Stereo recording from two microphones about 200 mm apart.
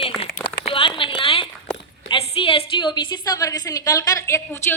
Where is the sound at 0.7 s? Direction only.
25° left (ahead or behind).